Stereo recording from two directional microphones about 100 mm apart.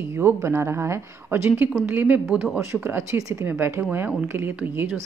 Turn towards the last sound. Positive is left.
turn(degrees=-20)  # may be behind; listen again after turning